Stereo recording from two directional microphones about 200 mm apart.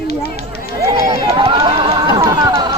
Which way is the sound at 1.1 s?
25° right (ahead or behind).